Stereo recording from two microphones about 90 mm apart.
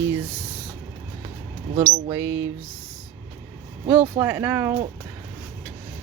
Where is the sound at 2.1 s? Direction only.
30° right (ahead or behind).